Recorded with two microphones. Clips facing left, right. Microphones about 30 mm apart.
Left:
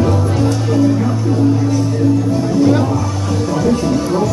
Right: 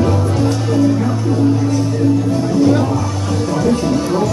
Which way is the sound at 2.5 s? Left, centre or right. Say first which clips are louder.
Even; centre.